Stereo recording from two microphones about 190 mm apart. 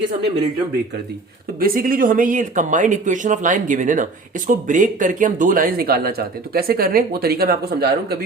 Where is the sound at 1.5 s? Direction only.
50° right (ahead or behind).